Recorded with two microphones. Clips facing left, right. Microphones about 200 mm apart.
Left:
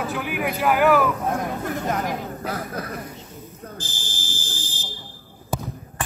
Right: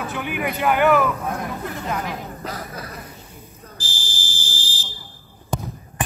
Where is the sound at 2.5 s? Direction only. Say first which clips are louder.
Left 4 dB; 55° left (ahead or behind).